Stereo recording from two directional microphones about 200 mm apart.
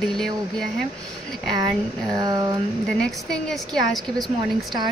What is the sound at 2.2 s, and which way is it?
Speech, 20° right (ahead or behind).